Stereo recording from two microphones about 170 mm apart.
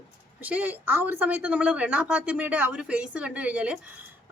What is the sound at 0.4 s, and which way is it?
A woman's voice, 10° right (ahead or behind).